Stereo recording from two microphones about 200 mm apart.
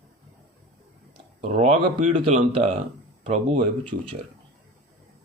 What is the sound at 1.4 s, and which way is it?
Speech, 35° right (ahead or behind).